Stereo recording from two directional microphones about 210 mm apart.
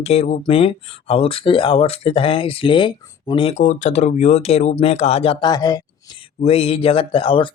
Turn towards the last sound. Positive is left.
turn(degrees=25)  # may be behind; listen again after turning